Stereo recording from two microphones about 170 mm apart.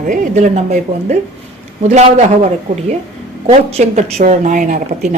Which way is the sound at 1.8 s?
45° right (ahead or behind).